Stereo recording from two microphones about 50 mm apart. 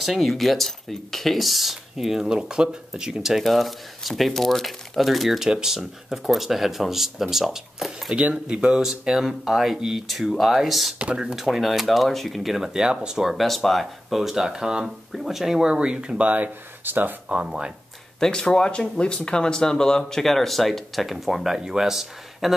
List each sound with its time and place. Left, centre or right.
0.0 s speech: centre
8.1 s speech: right
8.8 s speech: centre
11.0 s speech: right
11.3 s speech: centre
12.7 s speech: centre
13.3 s speech: centre
15.7 s speech: centre
16.8 s speech: right
17.3 s speech: right
18.2 s speech: centre